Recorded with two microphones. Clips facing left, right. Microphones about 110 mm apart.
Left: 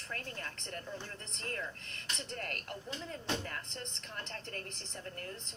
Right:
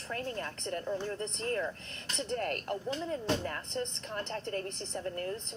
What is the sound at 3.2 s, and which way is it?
Speech, 35° right (ahead or behind).